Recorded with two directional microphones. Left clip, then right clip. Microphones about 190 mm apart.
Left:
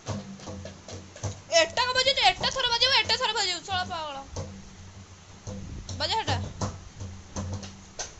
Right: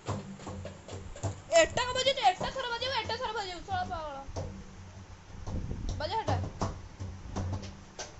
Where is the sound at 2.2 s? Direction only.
25° left (ahead or behind).